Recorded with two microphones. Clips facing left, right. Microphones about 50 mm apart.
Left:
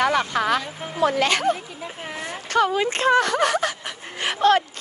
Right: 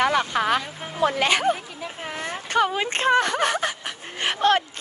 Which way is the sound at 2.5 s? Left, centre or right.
Right.